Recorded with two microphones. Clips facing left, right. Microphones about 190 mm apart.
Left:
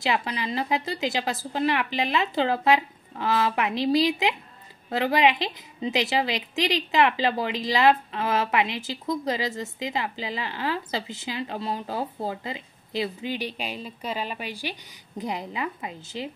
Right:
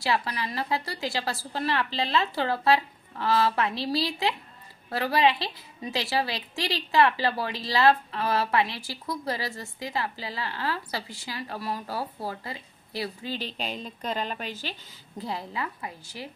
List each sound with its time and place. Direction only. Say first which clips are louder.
0.0 s a woman's voice: left 1 dB; 20° left (ahead or behind)